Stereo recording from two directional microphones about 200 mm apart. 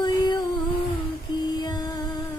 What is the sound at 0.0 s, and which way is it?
Music, 20° left (ahead or behind).